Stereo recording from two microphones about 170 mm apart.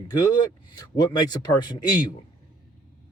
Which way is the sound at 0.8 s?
25° left (ahead or behind).